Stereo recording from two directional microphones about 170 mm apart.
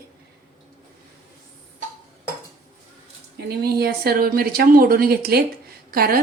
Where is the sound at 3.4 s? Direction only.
65° right (ahead or behind).